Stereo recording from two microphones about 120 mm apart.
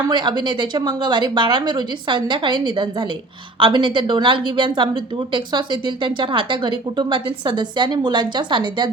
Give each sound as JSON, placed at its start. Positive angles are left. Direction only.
{"t": 0.1, "sound": "a woman's voice", "side_deg": -40}